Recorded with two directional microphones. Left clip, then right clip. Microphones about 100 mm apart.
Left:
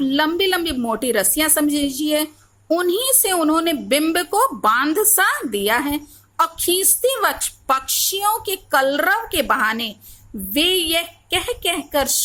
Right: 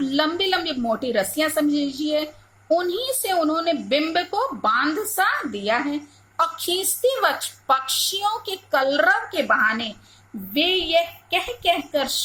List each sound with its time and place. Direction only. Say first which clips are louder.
0.0 s a woman's voice: left 4 dB; 40° left (ahead or behind)